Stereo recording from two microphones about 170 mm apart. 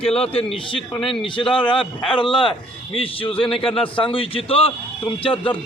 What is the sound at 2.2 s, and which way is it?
A man's voice, 30° left (ahead or behind).